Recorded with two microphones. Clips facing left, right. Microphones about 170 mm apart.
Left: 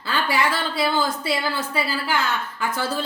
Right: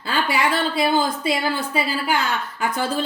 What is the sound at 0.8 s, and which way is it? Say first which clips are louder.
A woman's voice: right 1 dB; 20° right (ahead or behind).